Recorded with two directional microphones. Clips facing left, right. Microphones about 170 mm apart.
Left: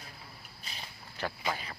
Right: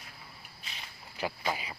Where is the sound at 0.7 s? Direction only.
35° left (ahead or behind).